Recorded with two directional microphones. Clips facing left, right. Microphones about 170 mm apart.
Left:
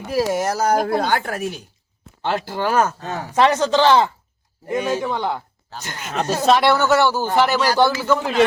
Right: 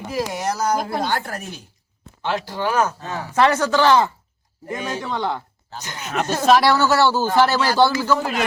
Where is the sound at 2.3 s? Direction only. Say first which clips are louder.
Left 2 dB; 50° left (ahead or behind).